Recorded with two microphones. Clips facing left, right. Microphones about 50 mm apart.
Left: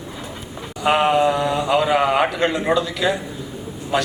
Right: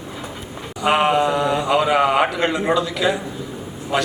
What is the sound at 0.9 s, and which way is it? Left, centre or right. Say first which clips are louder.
Mantra: even; centre.